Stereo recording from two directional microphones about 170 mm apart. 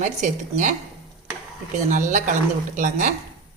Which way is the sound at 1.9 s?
50° right (ahead or behind).